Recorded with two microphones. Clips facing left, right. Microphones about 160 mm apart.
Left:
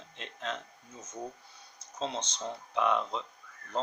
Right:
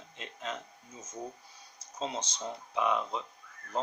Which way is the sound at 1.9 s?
5° right (ahead or behind).